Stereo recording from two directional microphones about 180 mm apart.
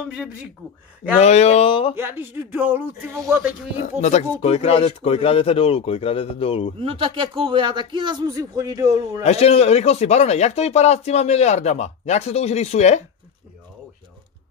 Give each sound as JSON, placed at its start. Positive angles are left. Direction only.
{"t": 0.1, "sound": "speech", "side_deg": -5}
{"t": 1.2, "sound": "speech", "side_deg": 35}
{"t": 2.0, "sound": "speech", "side_deg": -10}
{"t": 3.7, "sound": "speech", "side_deg": 40}
{"t": 6.8, "sound": "a man's voice", "side_deg": -30}
{"t": 9.2, "sound": "speech", "side_deg": 35}